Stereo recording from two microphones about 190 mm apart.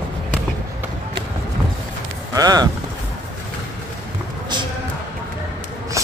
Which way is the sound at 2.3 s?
20° right (ahead or behind).